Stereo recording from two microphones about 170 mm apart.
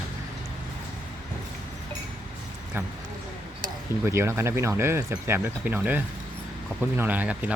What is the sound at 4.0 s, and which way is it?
Speech, 15° right (ahead or behind).